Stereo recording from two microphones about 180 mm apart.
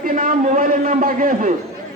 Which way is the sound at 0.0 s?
50° right (ahead or behind).